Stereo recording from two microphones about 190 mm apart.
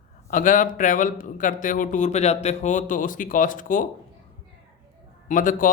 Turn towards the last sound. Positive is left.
turn(degrees=45)  # may be behind; listen again after turning